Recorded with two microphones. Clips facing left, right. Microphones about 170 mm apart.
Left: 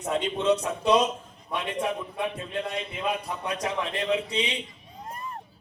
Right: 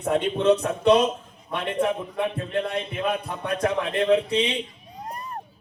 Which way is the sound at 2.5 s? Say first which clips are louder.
Right 5 dB; 55° right (ahead or behind).